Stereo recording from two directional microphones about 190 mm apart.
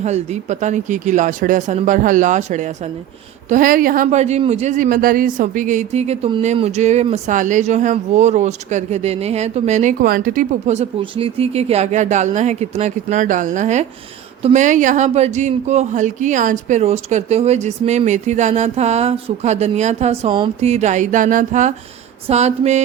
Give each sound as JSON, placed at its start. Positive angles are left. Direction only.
{"t": 0.0, "sound": "speech", "side_deg": -35}